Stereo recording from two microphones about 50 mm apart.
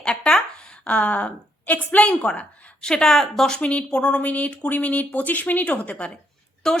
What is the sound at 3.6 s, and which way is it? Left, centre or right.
Speech, left.